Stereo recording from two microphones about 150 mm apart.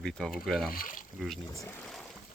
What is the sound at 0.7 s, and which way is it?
Speech, 70° left (ahead or behind).